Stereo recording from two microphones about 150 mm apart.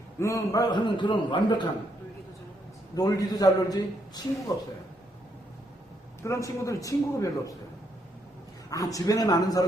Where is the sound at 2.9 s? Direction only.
25° left (ahead or behind).